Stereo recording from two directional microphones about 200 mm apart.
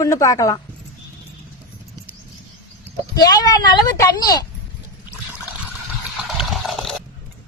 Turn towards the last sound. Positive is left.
turn(degrees=0)  # may be behind; listen again after turning